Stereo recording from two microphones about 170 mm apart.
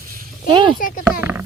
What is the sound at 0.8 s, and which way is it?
Speech, 55° left (ahead or behind).